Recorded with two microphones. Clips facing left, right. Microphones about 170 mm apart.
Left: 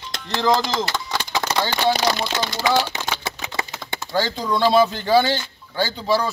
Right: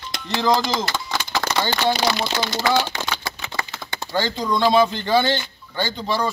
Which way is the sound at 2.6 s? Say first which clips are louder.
Even; 10° left (ahead or behind).